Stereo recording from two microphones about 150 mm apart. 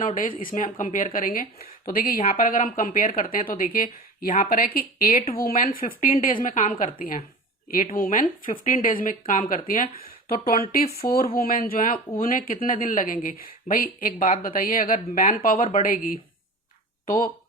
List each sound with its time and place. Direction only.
0.0 s speech: 65° left (ahead or behind)
7.9 s speech: 65° left (ahead or behind)